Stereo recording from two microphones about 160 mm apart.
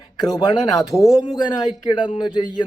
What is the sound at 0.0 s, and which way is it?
Speech, 25° left (ahead or behind).